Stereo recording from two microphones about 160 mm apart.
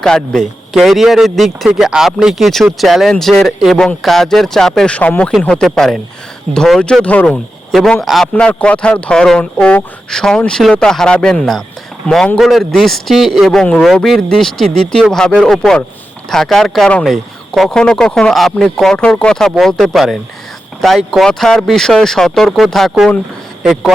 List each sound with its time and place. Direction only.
0.0 s speech: 5° left (ahead or behind)